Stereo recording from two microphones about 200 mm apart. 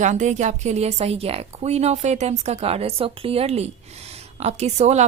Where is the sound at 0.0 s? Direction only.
35° right (ahead or behind).